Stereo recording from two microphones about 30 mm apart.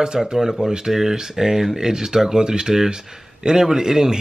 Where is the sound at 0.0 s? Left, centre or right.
Right.